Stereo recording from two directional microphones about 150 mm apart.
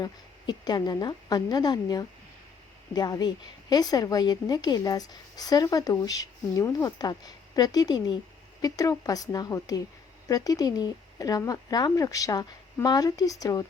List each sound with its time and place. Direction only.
0.0 s a woman's voice: 25° left (ahead or behind)